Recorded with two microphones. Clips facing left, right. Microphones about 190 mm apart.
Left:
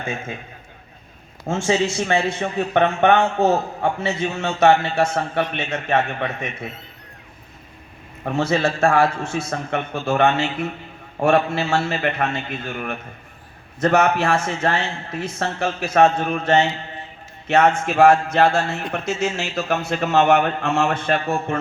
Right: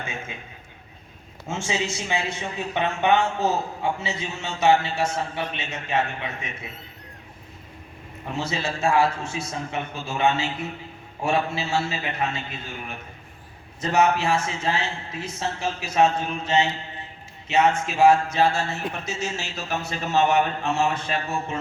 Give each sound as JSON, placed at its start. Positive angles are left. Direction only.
{"t": 0.0, "sound": "speech", "side_deg": 55}
{"t": 1.6, "sound": "a man's voice", "side_deg": 55}
{"t": 8.2, "sound": "speech", "side_deg": 55}
{"t": 8.8, "sound": "a man's voice", "side_deg": 70}
{"t": 9.3, "sound": "a man's voice", "side_deg": 55}